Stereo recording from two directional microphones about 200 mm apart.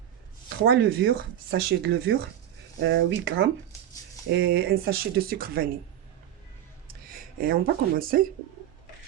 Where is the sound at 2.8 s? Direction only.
65° right (ahead or behind).